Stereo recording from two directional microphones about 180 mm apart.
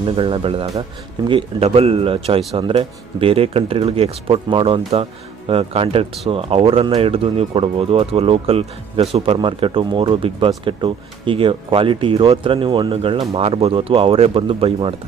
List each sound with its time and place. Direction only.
0.0 s speech: 30° right (ahead or behind)